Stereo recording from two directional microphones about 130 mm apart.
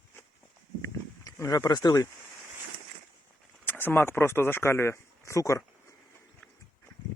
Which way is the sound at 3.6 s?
15° left (ahead or behind).